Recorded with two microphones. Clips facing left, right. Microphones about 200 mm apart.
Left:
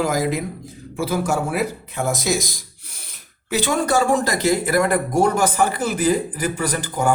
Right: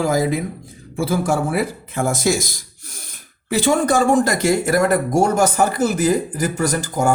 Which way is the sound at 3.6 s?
50° right (ahead or behind).